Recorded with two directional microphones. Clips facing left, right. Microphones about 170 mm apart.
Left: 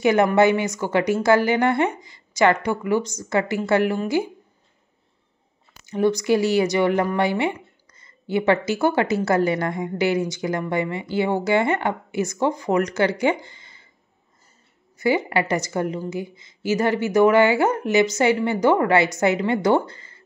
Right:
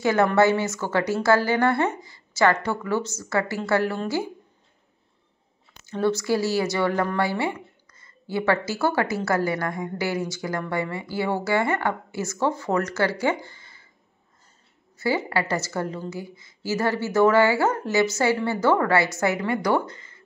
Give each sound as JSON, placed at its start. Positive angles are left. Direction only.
{"t": 0.0, "sound": "a woman's voice", "side_deg": 15}
{"t": 5.9, "sound": "a woman's voice", "side_deg": 15}
{"t": 15.0, "sound": "a woman's voice", "side_deg": 15}